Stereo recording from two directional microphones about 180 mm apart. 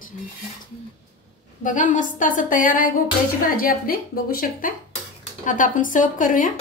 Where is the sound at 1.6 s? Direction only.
45° left (ahead or behind).